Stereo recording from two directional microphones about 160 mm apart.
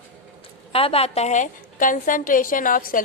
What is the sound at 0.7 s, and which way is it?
A woman's voice, 35° left (ahead or behind).